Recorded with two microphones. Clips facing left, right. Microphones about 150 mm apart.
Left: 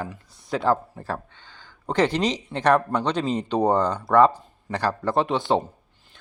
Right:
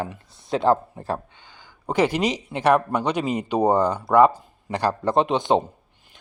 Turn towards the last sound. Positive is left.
turn(degrees=-20)  # may be behind; listen again after turning